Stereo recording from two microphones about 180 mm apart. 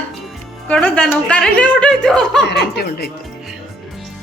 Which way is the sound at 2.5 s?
65° left (ahead or behind).